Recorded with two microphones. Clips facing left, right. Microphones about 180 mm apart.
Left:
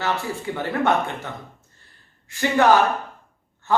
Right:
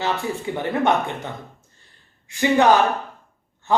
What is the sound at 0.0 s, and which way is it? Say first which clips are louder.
Speech: right 1 dB; 20° right (ahead or behind).